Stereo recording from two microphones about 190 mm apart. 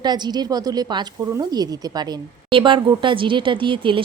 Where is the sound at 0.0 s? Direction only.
20° right (ahead or behind).